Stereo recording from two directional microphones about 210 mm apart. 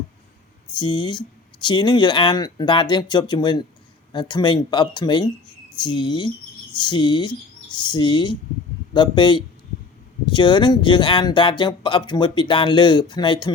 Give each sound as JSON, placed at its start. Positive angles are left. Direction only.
{"t": 0.8, "sound": "speech", "side_deg": 20}